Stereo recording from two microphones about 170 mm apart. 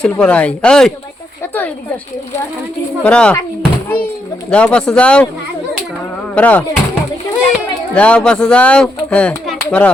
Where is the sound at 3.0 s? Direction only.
5° left (ahead or behind).